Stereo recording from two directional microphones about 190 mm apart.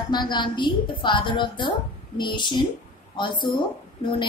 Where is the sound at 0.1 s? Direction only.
25° left (ahead or behind).